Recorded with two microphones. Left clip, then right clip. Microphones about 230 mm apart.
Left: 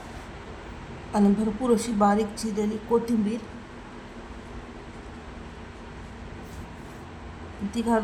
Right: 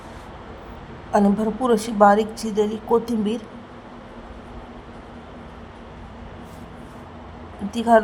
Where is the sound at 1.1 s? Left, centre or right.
Centre.